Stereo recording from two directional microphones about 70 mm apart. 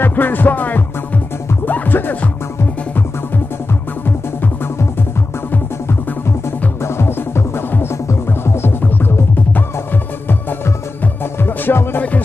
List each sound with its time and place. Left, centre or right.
0.0 s music: left
7.0 s music: left
11.4 s music: left